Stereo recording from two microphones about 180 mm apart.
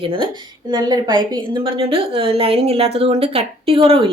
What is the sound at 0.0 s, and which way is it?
A woman's voice, 30° right (ahead or behind).